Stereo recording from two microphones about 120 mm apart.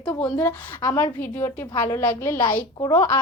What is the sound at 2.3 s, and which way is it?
Speech, 35° left (ahead or behind).